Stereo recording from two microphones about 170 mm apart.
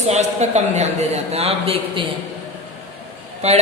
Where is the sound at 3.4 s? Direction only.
40° right (ahead or behind).